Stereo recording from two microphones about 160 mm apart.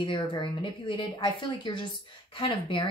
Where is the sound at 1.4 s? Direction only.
30° left (ahead or behind).